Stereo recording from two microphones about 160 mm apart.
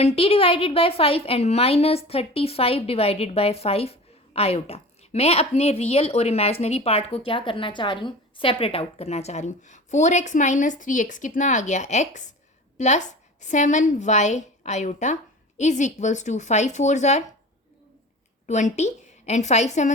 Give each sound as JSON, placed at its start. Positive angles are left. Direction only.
{"t": 0.2, "sound": "a woman's voice", "side_deg": 35}
{"t": 18.4, "sound": "a woman's voice", "side_deg": 45}